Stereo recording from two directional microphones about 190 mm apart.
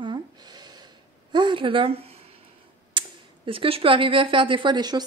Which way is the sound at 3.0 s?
25° right (ahead or behind).